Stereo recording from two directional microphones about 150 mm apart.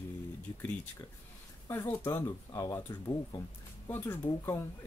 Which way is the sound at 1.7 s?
15° left (ahead or behind).